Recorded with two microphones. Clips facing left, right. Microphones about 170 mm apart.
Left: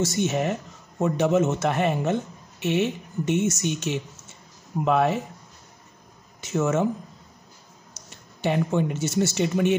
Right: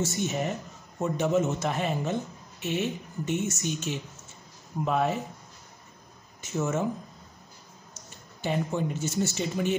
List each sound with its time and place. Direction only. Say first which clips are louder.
0.0 s a man's voice: left 5 dB; 80° left
6.4 s speech: left 5 dB; 90° left
8.0 s a sound: even; 90° left
8.4 s a man's voice: left 5 dB; 70° left (ahead or behind)